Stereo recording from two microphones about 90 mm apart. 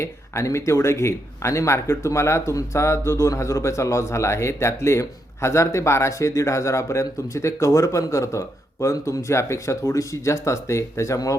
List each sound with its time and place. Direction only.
0.0 s speech: 35° left (ahead or behind)